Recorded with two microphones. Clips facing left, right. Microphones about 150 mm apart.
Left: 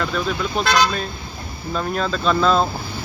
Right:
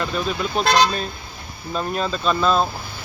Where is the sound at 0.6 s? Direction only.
35° right (ahead or behind).